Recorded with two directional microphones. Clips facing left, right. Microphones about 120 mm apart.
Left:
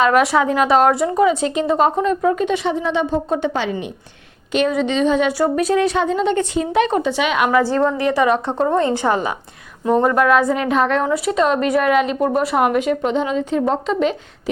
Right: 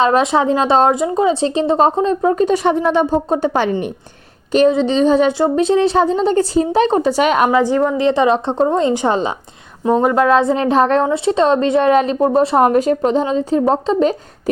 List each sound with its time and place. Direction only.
0.0 s a woman's voice: 25° right (ahead or behind)
2.6 s speech: 55° right (ahead or behind)
3.1 s a woman's voice: 35° right (ahead or behind)
4.5 s a woman's voice: 30° right (ahead or behind)
5.4 s a woman's voice: 25° right (ahead or behind); by 7.5 s 40° right (ahead or behind)
7.5 s a woman's voice: 15° right (ahead or behind); by 14.5 s 40° right (ahead or behind)